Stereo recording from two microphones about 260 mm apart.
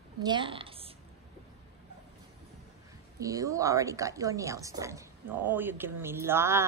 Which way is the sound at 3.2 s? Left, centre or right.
Centre.